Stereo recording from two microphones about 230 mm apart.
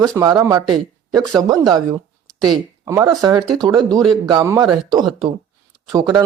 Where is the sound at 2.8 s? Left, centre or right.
Centre.